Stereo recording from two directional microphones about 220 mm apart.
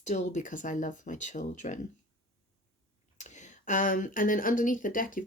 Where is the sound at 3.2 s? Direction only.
35° left (ahead or behind).